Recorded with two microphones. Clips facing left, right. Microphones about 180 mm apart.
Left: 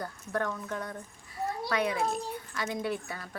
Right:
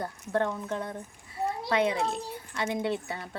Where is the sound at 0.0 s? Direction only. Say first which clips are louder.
Right 4 dB; 25° right (ahead or behind).